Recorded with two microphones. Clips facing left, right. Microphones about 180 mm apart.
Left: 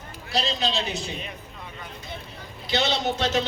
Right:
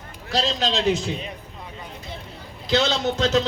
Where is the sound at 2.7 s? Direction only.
90° right.